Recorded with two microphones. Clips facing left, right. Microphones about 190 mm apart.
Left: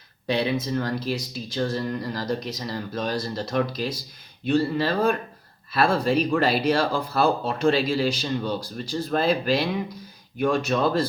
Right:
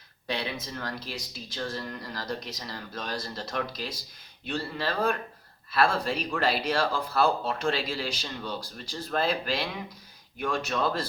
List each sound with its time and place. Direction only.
0.3 s speech: 15° left (ahead or behind)
10.4 s speech: 20° left (ahead or behind)